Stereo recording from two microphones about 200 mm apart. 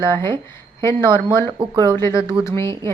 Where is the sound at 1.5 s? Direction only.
20° right (ahead or behind).